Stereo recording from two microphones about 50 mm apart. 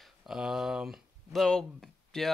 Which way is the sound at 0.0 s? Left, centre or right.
Centre.